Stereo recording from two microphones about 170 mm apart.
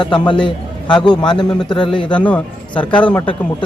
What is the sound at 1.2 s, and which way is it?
Speech, 25° left (ahead or behind).